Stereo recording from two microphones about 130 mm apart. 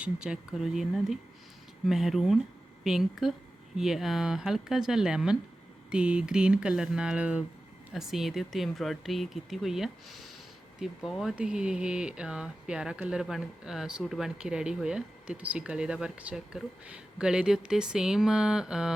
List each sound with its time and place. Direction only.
0.0 s speech: 5° right (ahead or behind)